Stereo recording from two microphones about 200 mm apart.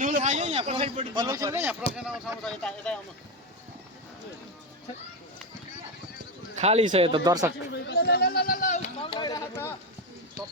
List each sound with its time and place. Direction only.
0.0 s speech: 40° right (ahead or behind); by 1.7 s 15° right (ahead or behind)
2.0 s speech: 5° right (ahead or behind)
6.6 s speech: 30° right (ahead or behind)
7.7 s speech: 55° left (ahead or behind)
9.0 s speech: 20° left (ahead or behind)